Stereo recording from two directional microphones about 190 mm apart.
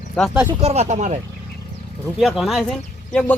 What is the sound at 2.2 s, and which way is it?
Speech, centre (ahead or behind).